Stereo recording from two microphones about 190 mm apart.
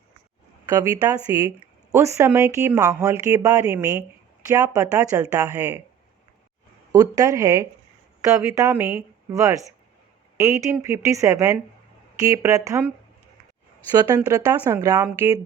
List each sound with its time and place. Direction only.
0.7 s speech: 15° right (ahead or behind)
6.9 s speech: 20° right (ahead or behind)
14.3 s speech: 20° right (ahead or behind)